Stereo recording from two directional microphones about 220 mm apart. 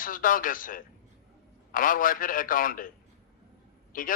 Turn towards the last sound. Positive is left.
turn(degrees=40)  # may be behind; listen again after turning